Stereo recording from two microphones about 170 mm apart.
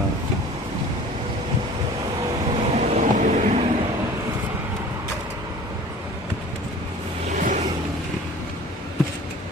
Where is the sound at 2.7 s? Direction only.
45° right (ahead or behind).